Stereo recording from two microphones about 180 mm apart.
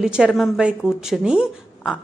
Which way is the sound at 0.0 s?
5° right (ahead or behind).